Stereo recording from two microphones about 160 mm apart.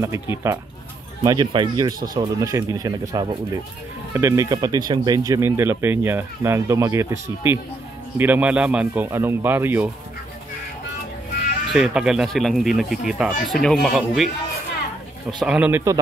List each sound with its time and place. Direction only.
0.0 s speech: 20° right (ahead or behind)
11.7 s speech: 5° right (ahead or behind)
15.4 s speech: 5° right (ahead or behind)